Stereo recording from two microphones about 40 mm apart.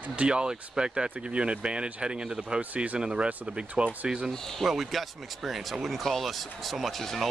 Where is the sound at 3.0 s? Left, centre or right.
Right.